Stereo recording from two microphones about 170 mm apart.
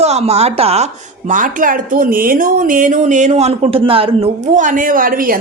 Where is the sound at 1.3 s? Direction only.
50° right (ahead or behind).